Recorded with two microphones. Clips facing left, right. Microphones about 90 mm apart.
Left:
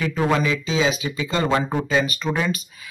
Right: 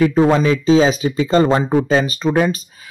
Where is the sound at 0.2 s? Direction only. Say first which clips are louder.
Right 4 dB; 25° right (ahead or behind).